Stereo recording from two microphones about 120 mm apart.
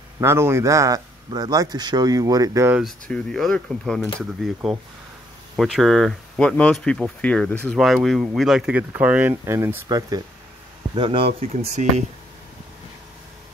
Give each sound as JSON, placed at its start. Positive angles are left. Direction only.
{"t": 0.2, "sound": "speech", "side_deg": -20}
{"t": 3.1, "sound": "speech", "side_deg": 5}
{"t": 5.6, "sound": "speech", "side_deg": 0}
{"t": 7.8, "sound": "speech", "side_deg": 0}
{"t": 11.0, "sound": "speech", "side_deg": -45}